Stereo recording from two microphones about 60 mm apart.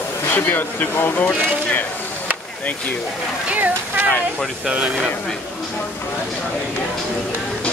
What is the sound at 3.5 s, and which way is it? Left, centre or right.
Speech, right.